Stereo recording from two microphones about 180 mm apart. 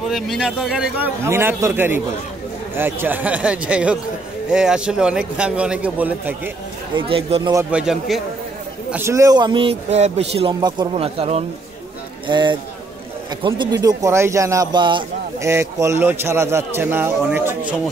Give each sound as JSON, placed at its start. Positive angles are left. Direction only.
{"t": 0.1, "sound": "a man's voice", "side_deg": 0}
{"t": 7.0, "sound": "a man's voice", "side_deg": -30}
{"t": 7.7, "sound": "a man's voice", "side_deg": -5}
{"t": 8.9, "sound": "a man's voice", "side_deg": -15}
{"t": 15.4, "sound": "a man's voice", "side_deg": -15}